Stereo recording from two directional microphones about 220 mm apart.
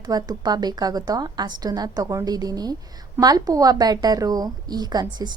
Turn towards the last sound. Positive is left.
turn(degrees=-20)  # may be behind; listen again after turning